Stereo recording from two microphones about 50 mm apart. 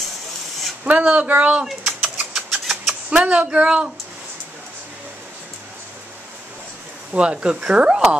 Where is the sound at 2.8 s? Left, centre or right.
Right.